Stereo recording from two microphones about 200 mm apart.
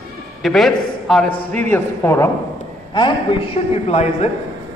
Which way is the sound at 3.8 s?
35° left (ahead or behind).